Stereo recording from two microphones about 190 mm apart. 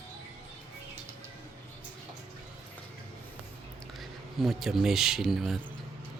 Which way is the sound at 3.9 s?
Centre (ahead or behind).